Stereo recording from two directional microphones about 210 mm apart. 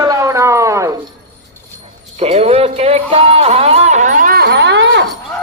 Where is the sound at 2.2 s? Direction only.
30° right (ahead or behind); by 5.1 s 60° right (ahead or behind).